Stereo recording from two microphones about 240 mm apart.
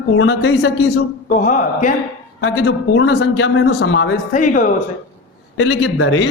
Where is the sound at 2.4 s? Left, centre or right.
Left.